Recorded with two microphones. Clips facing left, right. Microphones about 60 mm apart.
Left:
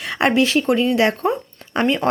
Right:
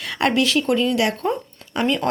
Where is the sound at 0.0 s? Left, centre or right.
Left.